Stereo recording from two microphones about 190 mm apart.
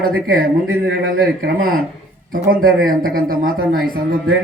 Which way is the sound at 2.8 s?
50° right (ahead or behind).